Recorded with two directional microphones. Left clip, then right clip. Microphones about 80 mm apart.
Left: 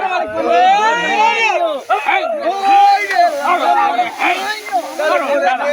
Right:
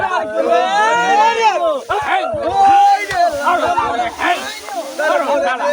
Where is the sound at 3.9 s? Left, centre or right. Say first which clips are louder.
Left 1 dB; right.